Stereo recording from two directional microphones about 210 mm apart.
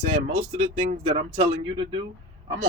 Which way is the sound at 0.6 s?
35° right (ahead or behind).